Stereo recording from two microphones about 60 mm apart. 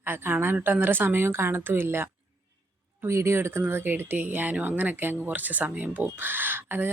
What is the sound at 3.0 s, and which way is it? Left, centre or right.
Speech, right.